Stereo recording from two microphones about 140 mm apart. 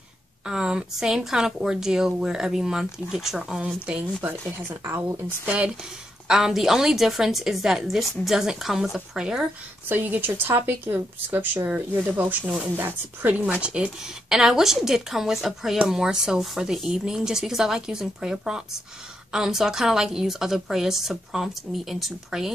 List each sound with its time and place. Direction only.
0.5 s a woman's voice: 5° right (ahead or behind)
6.2 s speech: 5° right (ahead or behind)